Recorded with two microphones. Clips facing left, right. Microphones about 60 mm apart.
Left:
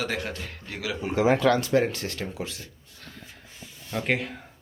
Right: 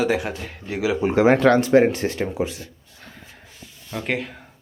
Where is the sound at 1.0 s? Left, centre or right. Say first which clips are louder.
Right 5 dB; right.